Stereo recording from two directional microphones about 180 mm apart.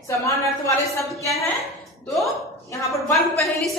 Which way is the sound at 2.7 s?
15° left (ahead or behind).